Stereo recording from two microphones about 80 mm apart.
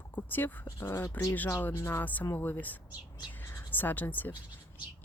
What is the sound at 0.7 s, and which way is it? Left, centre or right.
Speech, left.